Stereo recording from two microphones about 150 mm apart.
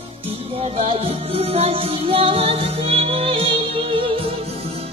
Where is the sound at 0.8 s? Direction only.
40° right (ahead or behind).